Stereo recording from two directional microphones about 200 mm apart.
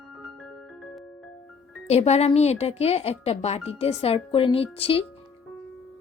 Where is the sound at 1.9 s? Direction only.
30° left (ahead or behind).